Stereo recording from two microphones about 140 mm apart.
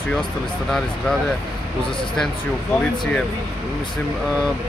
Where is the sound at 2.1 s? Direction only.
5° left (ahead or behind).